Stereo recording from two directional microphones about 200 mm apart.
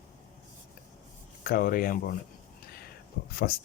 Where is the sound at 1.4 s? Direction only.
45° left (ahead or behind).